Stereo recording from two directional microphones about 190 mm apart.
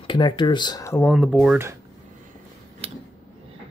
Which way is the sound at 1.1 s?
Centre (ahead or behind).